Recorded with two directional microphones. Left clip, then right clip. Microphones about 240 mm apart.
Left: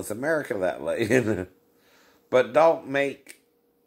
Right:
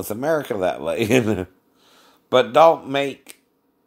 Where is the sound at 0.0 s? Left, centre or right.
Right.